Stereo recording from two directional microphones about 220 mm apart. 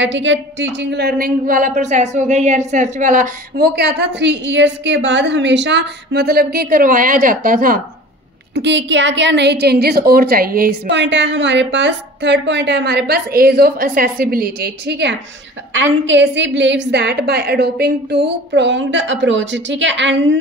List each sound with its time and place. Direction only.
0.0 s speech: 55° right (ahead or behind); by 7.8 s 40° right (ahead or behind)
8.5 s a woman's voice: 55° right (ahead or behind)